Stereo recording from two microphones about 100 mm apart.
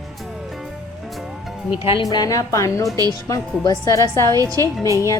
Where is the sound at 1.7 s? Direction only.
65° left (ahead or behind).